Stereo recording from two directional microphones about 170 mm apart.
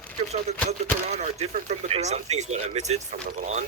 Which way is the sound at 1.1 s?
45° right (ahead or behind).